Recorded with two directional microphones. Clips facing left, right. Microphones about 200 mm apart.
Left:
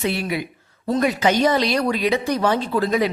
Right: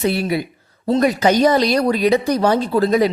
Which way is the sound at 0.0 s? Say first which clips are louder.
Right 4 dB; 40° right (ahead or behind).